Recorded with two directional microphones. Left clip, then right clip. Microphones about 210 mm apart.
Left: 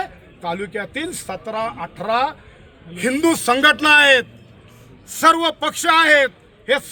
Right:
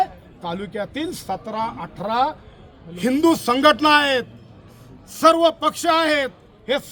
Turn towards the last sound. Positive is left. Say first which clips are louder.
# left 4 dB
turn(degrees=-15)  # may be behind; listen again after turning